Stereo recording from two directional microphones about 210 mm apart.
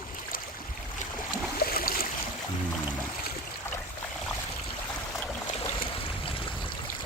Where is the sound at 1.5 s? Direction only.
45° left (ahead or behind).